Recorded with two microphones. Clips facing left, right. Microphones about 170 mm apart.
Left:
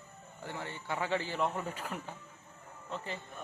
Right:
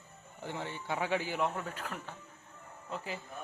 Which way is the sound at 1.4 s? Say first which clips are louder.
Even; 5° left (ahead or behind).